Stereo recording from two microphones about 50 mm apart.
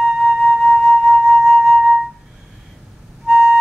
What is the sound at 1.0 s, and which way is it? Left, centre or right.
Flute, centre.